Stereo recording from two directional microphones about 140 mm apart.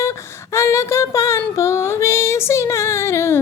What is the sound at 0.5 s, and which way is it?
Child singing, 20° left (ahead or behind).